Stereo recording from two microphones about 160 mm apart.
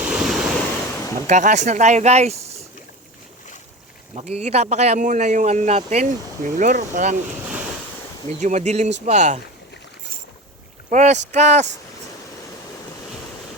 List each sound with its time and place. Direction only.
0.0 s waves: 5° right (ahead or behind)
1.3 s a man's voice: 50° right (ahead or behind)
4.1 s a man's voice: 40° right (ahead or behind)
8.3 s a man's voice: 45° right (ahead or behind)
10.8 s a man's voice: 45° right (ahead or behind)